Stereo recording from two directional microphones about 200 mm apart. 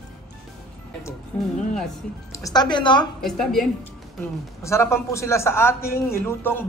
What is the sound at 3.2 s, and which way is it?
Speech, centre (ahead or behind).